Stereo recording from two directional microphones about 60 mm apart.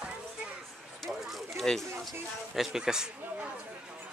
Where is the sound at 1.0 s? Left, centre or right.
Centre.